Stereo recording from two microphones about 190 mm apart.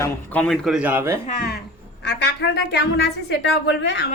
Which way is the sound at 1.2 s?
50° left (ahead or behind).